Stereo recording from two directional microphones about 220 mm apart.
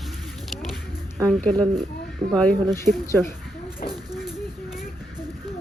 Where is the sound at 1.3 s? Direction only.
5° left (ahead or behind).